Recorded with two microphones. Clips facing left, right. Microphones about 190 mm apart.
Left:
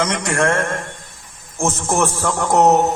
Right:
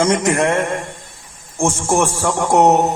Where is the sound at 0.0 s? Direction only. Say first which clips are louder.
Right 6 dB; 25° right (ahead or behind).